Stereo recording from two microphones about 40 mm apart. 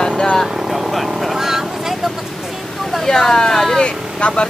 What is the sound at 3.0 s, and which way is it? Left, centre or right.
Speech, centre.